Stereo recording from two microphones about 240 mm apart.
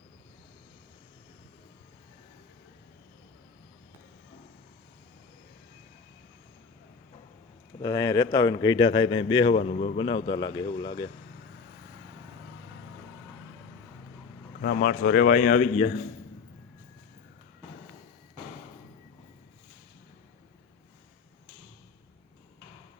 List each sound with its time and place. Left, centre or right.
7.8 s speech: centre
14.6 s speech: left